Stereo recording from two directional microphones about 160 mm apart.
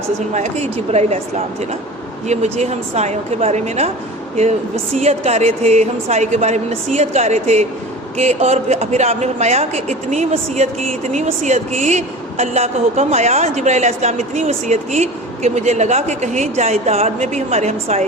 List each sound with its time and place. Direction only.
0.3 s a man's voice: 45° right (ahead or behind)
2.2 s a man's voice: 45° right (ahead or behind)
4.9 s a man's voice: 40° right (ahead or behind)